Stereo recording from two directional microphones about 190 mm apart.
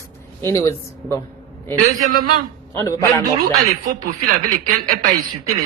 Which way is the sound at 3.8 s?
45° right (ahead or behind).